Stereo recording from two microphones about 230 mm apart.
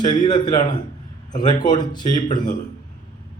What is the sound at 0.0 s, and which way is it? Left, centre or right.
A man's voice, centre.